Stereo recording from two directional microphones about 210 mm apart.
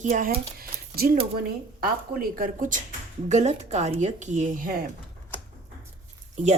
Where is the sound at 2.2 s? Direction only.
40° right (ahead or behind).